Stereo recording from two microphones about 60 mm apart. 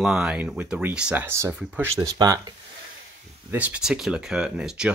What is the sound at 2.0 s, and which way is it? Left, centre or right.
Speech, right.